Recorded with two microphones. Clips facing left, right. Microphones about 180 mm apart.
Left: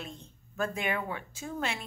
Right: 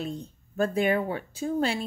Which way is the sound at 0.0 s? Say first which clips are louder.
Right 10 dB; 35° right (ahead or behind).